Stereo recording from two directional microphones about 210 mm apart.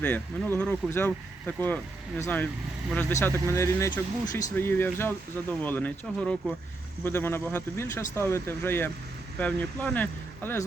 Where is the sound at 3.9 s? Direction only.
35° left (ahead or behind).